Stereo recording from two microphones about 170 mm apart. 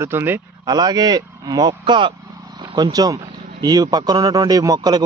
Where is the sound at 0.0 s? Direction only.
15° right (ahead or behind).